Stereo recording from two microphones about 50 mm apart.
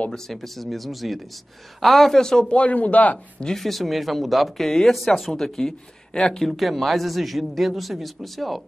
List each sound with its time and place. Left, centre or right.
0.1 s speech: centre
2.5 s speech: left
3.4 s speech: centre